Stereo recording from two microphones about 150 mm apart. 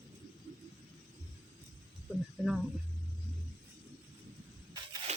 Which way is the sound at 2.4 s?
Centre (ahead or behind).